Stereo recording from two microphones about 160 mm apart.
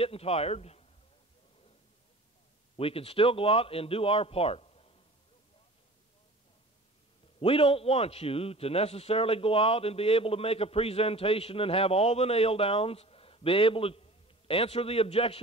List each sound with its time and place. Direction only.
0.0 s a man's voice: 40° left (ahead or behind)
2.8 s a man's voice: 35° left (ahead or behind)
7.3 s a man's voice: 35° left (ahead or behind)